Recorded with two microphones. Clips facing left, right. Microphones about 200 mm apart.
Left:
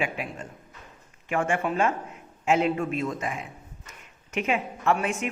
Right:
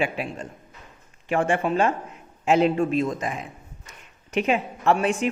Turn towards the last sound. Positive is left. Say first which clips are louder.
# right 4 dB
turn(degrees=-30)  # may be behind; listen again after turning